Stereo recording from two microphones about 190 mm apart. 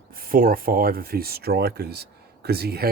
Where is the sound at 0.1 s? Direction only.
50° right (ahead or behind).